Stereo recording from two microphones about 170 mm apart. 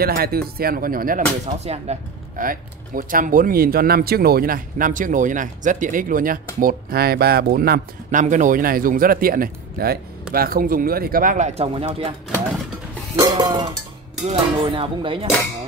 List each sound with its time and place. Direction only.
0.0 s speech: 65° right (ahead or behind); by 12.1 s 35° right (ahead or behind)
13.1 s a sound: 25° right (ahead or behind)
14.6 s speech: 30° right (ahead or behind)